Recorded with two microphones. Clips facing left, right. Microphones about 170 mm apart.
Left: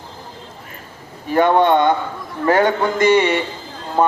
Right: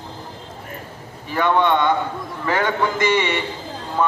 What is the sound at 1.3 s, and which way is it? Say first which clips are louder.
A man's voice: left 4 dB; 40° left (ahead or behind).